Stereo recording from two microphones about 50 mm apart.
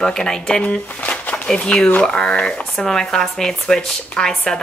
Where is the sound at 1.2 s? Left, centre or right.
Left.